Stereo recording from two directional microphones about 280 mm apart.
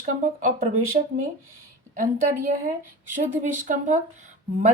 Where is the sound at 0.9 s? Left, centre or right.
Right.